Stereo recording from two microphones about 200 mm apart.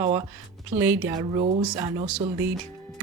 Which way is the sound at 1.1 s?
20° right (ahead or behind).